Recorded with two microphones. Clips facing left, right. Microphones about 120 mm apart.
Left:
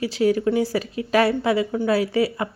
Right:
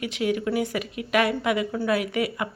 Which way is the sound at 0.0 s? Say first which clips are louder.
Left 6 dB; 35° left (ahead or behind).